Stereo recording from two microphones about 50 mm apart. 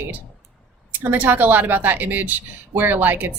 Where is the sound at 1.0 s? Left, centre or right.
Right.